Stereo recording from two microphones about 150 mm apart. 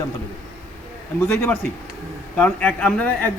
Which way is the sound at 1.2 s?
15° left (ahead or behind).